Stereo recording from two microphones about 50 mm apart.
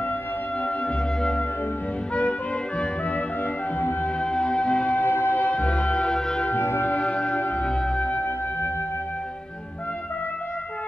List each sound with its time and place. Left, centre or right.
0.8 s music: centre
4.2 s music: centre
5.0 s music: left
5.5 s music: left
6.5 s music: left
7.0 s music: left
7.3 s music: left
7.6 s music: centre